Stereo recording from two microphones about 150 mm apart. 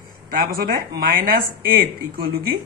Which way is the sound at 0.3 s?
75° right (ahead or behind).